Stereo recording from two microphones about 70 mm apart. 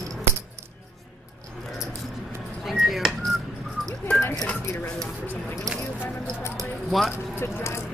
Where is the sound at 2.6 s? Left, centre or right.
Centre.